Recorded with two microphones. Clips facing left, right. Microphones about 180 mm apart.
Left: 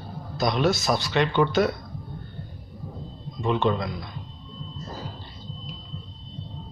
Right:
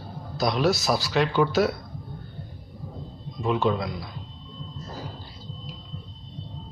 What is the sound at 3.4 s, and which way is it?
Speech, centre (ahead or behind).